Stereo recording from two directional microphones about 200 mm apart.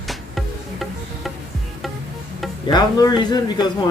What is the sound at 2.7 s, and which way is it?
Speech, 20° left (ahead or behind).